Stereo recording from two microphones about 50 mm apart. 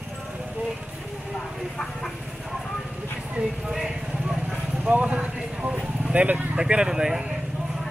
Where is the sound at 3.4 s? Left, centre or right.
Right.